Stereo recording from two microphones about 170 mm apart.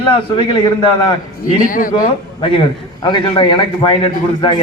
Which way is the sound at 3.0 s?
30° left (ahead or behind).